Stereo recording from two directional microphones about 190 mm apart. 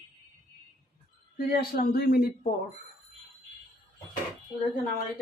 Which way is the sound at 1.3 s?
55° left (ahead or behind).